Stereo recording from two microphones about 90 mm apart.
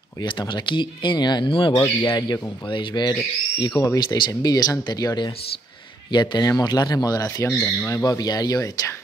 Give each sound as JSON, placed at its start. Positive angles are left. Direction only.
{"t": 0.2, "sound": "speech", "side_deg": 60}
{"t": 1.8, "sound": "speech", "side_deg": 45}
{"t": 2.7, "sound": "speech", "side_deg": 60}
{"t": 3.8, "sound": "speech", "side_deg": 40}
{"t": 7.4, "sound": "speech", "side_deg": 35}